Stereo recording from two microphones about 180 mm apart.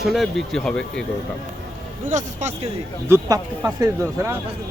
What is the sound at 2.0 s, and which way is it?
Speech, 45° right (ahead or behind).